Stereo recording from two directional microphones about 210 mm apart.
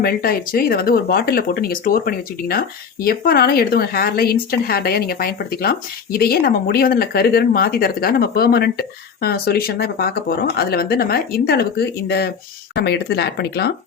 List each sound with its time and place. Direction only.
0.0 s speech: 45° left (ahead or behind)